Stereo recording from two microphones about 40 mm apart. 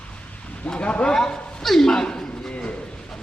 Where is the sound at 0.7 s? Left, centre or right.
Left.